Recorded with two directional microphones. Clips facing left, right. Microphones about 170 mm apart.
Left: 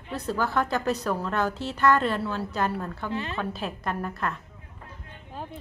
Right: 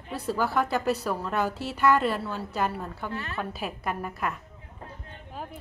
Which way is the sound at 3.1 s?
20° left (ahead or behind).